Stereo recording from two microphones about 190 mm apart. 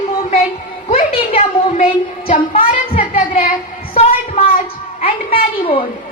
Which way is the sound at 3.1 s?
30° left (ahead or behind).